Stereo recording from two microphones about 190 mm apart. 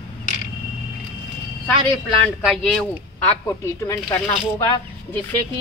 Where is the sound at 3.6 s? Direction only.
15° left (ahead or behind).